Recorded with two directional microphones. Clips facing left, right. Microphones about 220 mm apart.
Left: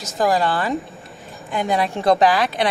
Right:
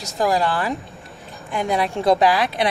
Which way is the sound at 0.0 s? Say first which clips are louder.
Left 1 dB; centre (ahead or behind).